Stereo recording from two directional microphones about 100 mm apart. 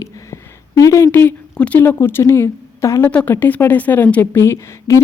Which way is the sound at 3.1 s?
15° left (ahead or behind).